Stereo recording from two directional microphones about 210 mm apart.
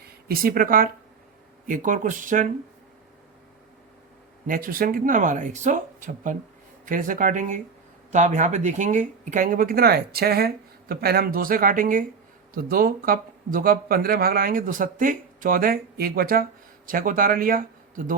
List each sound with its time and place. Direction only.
0.0 s speech: 45° right (ahead or behind)
4.4 s speech: 40° right (ahead or behind)